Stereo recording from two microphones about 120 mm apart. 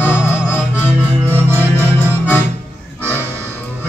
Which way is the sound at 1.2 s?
20° right (ahead or behind).